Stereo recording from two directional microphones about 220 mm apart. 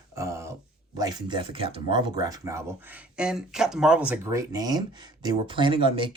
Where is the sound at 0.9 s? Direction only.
15° right (ahead or behind).